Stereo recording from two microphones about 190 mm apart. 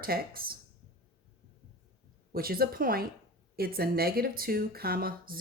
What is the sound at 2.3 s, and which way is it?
Speech, 50° right (ahead or behind).